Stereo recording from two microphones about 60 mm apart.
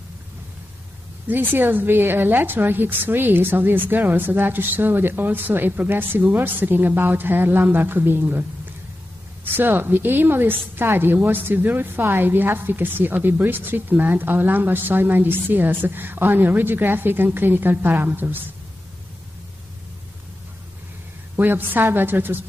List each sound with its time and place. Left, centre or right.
1.2 s a woman's voice: right
21.4 s a woman's voice: right